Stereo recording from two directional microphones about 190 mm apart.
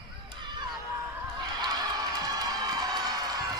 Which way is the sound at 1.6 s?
20° right (ahead or behind).